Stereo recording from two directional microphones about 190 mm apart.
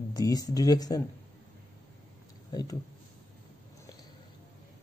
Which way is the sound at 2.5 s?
20° left (ahead or behind).